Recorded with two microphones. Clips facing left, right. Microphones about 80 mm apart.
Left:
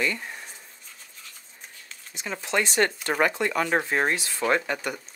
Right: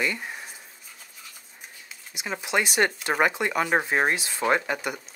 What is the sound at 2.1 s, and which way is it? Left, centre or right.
Speech, centre.